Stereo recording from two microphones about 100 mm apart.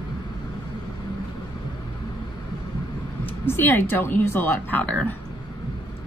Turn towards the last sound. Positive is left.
turn(degrees=15)  # may be behind; listen again after turning